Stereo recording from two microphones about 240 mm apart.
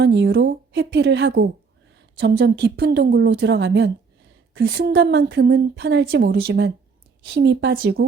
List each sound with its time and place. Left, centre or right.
0.0 s a woman's voice: right